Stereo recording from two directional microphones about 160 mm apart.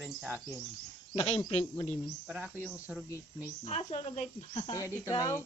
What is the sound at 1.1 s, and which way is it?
Speech, 40° left (ahead or behind).